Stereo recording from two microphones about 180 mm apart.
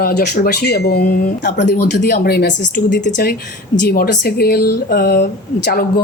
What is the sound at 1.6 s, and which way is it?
Speech, 70° left (ahead or behind).